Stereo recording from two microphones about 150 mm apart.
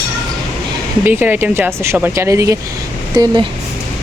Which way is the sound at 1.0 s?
15° right (ahead or behind).